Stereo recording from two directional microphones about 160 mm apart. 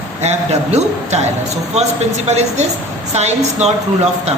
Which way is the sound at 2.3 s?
45° right (ahead or behind).